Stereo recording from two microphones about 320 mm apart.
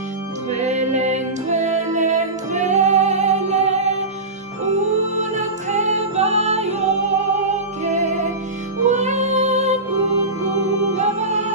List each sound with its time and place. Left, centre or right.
0.5 s music: right
5.3 s music: right
11.0 s music: right